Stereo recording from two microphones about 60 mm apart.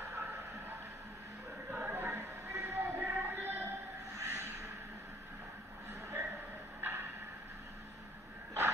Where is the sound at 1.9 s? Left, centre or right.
Right.